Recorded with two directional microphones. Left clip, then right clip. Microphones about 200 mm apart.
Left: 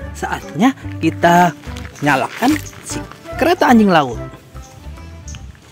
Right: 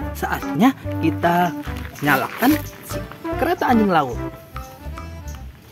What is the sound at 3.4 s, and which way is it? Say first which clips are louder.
Speech: left 6 dB; 45° left (ahead or behind).